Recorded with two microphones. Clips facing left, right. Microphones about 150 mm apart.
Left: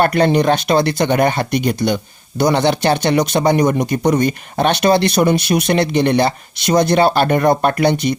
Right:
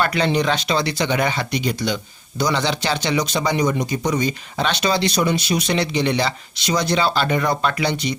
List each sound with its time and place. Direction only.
0.0 s speech: 50° left (ahead or behind)